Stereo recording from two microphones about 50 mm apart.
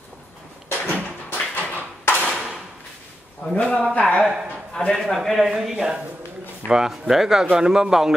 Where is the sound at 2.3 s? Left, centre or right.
Centre.